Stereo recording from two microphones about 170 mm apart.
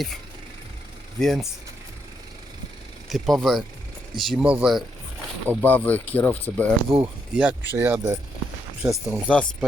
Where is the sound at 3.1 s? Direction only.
Centre (ahead or behind).